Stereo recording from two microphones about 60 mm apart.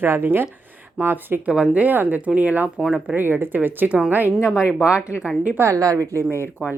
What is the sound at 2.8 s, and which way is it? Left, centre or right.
Speech, centre.